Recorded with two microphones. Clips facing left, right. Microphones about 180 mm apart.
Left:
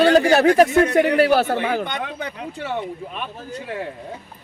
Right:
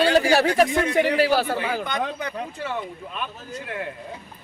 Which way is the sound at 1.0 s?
55° left (ahead or behind).